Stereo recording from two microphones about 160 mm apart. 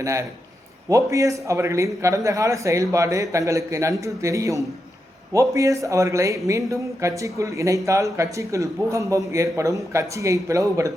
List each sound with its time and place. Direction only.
0.0 s speech: 20° right (ahead or behind)